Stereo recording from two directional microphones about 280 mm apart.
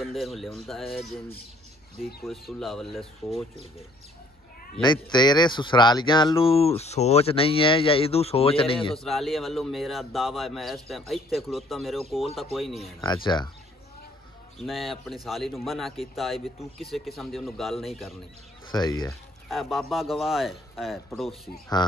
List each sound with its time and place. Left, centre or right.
0.0 s a man's voice: centre
2.2 s a man's voice: centre
4.9 s speech: centre
8.9 s a man's voice: centre
13.0 s speech: centre
14.6 s a man's voice: centre
18.7 s speech: centre
19.5 s a man's voice: centre
21.8 s speech: centre